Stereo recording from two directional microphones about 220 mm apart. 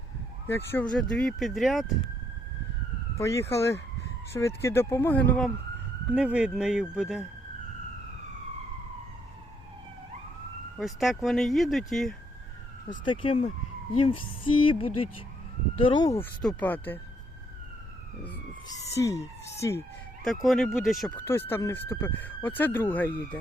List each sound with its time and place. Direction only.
0.4 s speech: 10° left (ahead or behind)
3.2 s speech: 15° left (ahead or behind)
6.1 s speech: 5° right (ahead or behind)
10.8 s speech: centre (ahead or behind)
13.1 s music: 25° left (ahead or behind)
16.4 s speech: 5° left (ahead or behind)
18.7 s speech: 15° left (ahead or behind)
20.2 s speech: centre (ahead or behind)
21.2 s speech: 10° left (ahead or behind)